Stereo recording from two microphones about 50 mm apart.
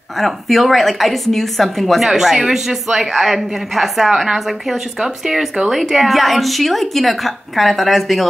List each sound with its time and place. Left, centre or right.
0.2 s a woman's voice: centre